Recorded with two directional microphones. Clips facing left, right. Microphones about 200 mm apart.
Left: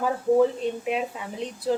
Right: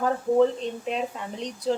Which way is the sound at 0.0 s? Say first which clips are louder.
Even; 5° left (ahead or behind).